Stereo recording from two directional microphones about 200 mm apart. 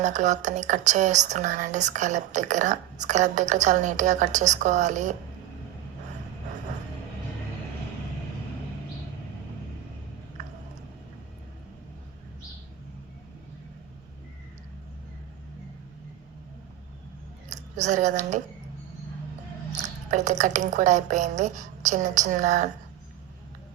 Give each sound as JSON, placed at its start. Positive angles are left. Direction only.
{"t": 0.0, "sound": "a woman's voice", "side_deg": -35}
{"t": 17.5, "sound": "a woman's voice", "side_deg": -35}
{"t": 19.7, "sound": "a woman's voice", "side_deg": -35}